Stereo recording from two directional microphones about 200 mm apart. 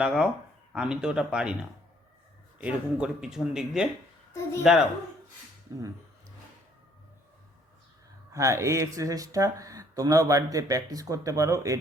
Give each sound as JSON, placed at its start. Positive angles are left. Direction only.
{"t": 0.0, "sound": "speech", "side_deg": -5}
{"t": 2.6, "sound": "speech", "side_deg": -5}
{"t": 8.3, "sound": "speech", "side_deg": -15}